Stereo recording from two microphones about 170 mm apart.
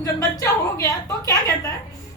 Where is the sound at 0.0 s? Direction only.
20° left (ahead or behind).